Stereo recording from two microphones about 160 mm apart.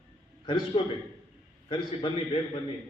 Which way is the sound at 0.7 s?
35° left (ahead or behind).